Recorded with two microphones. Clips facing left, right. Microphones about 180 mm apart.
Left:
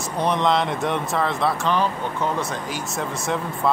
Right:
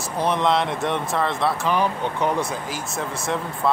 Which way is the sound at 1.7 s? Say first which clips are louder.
Right 1 dB; 15° right (ahead or behind).